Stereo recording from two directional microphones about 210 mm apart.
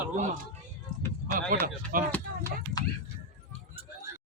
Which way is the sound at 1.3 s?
40° right (ahead or behind).